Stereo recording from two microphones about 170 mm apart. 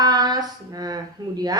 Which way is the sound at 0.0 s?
25° right (ahead or behind).